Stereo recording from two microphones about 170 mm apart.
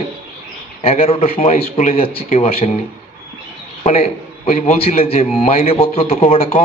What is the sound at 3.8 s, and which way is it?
A man's voice, 35° left (ahead or behind).